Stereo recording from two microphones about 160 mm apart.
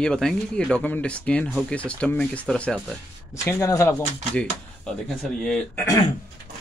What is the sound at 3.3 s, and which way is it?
Speech, 20° left (ahead or behind).